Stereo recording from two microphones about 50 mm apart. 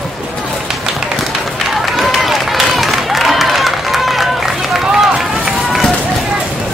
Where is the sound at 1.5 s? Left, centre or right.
Centre.